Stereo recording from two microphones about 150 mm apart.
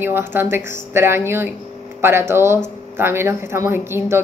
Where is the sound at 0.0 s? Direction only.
15° right (ahead or behind).